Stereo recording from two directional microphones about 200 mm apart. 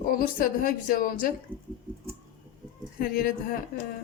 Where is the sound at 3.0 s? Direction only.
45° left (ahead or behind).